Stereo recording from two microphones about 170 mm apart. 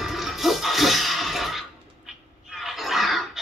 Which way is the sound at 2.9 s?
Centre (ahead or behind).